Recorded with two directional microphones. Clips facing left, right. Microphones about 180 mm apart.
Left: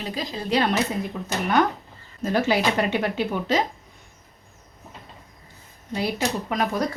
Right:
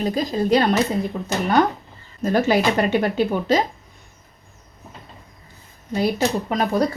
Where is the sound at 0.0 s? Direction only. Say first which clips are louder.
Right 9 dB; 45° right (ahead or behind).